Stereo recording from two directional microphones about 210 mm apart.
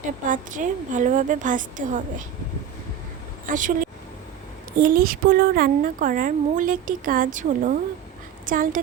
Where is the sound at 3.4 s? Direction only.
40° right (ahead or behind).